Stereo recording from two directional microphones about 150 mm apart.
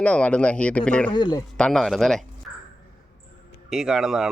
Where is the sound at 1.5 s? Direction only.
5° left (ahead or behind).